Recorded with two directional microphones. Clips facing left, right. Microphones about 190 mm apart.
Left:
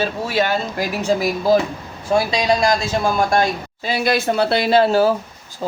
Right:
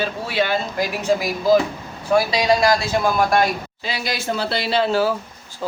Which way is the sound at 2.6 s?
25° left (ahead or behind).